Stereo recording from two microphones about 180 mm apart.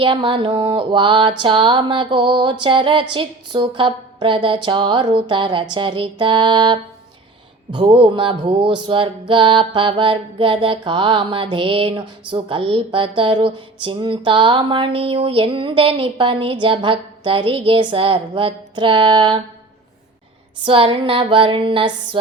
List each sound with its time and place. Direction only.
0.0 s music: 30° right (ahead or behind)
20.7 s music: 30° right (ahead or behind)